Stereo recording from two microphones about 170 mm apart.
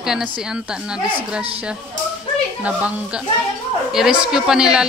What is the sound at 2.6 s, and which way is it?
Speech, 5° right (ahead or behind).